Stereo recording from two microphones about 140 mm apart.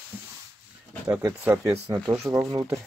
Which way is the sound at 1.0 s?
20° right (ahead or behind).